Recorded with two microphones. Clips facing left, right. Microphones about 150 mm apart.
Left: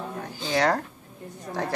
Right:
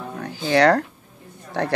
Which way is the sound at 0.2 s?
70° right (ahead or behind).